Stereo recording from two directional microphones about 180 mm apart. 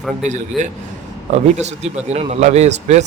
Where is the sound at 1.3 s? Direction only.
40° right (ahead or behind).